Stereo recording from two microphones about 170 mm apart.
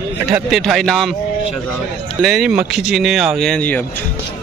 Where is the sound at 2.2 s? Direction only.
Centre (ahead or behind).